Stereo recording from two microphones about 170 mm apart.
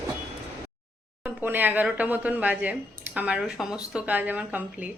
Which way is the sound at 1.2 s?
10° right (ahead or behind).